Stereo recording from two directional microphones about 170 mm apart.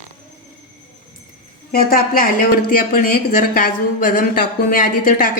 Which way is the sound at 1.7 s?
60° left (ahead or behind).